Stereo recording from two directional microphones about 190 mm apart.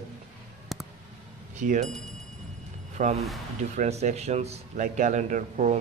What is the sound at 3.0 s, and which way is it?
Speech, 40° right (ahead or behind).